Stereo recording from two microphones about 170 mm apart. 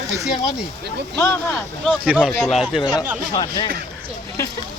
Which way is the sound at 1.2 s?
15° left (ahead or behind).